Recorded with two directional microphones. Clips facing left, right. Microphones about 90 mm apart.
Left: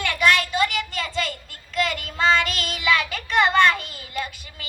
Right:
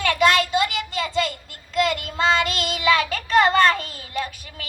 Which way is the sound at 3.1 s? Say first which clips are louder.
Right 3 dB; 40° right (ahead or behind).